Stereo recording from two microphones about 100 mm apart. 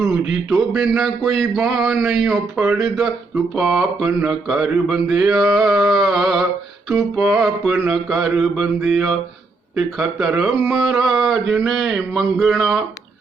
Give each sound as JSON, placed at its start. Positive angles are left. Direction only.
{"t": 0.3, "sound": "speech", "side_deg": -5}